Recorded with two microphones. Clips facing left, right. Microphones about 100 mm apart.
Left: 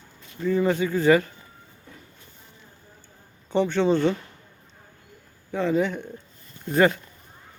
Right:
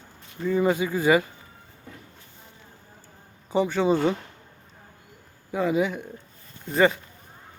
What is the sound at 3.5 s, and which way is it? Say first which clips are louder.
Speech: left 1 dB; 5° right (ahead or behind).